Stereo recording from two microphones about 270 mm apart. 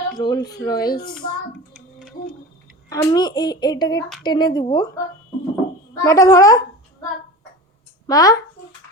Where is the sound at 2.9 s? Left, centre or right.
Centre.